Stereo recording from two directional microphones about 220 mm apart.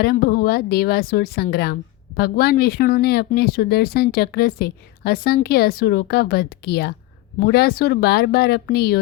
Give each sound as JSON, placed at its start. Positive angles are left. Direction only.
{"t": 0.0, "sound": "a woman's voice", "side_deg": 45}